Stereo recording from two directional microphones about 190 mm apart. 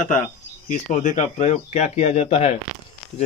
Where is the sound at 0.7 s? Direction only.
40° left (ahead or behind).